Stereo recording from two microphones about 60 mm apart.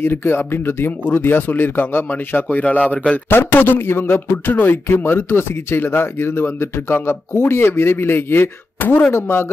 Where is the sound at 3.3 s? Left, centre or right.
Left.